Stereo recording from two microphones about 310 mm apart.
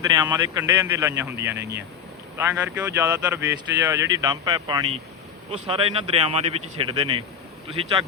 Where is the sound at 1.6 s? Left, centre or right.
Right.